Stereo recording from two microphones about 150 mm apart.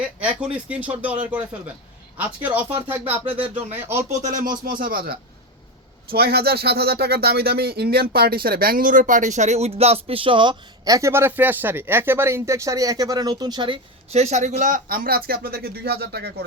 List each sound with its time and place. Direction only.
0.0 s speech: 10° right (ahead or behind)
3.3 s speech: 40° right (ahead or behind)
3.7 s speech: 15° right (ahead or behind)
4.6 s a man's voice: 70° right (ahead or behind)
6.1 s speech: 90° right